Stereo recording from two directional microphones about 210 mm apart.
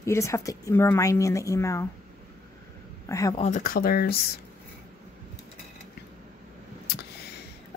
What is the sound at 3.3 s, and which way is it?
Speech, 35° left (ahead or behind).